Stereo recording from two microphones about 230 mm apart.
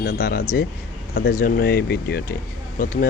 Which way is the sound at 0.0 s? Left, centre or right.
Left.